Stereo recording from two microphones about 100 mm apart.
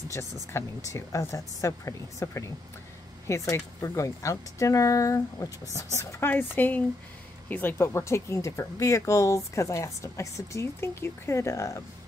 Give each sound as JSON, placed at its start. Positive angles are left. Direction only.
{"t": 0.1, "sound": "speech", "side_deg": 30}
{"t": 6.3, "sound": "speech", "side_deg": 20}